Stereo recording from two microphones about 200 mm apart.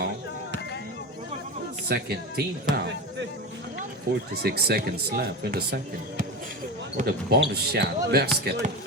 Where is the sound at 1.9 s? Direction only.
50° right (ahead or behind).